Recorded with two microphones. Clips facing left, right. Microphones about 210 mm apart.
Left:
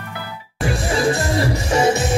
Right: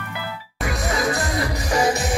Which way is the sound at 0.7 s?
30° left (ahead or behind).